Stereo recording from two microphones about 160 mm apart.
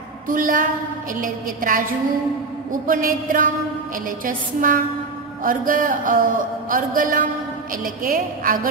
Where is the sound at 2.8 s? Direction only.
60° right (ahead or behind).